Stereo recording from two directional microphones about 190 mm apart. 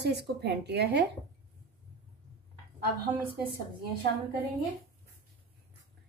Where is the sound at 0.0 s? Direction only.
60° right (ahead or behind).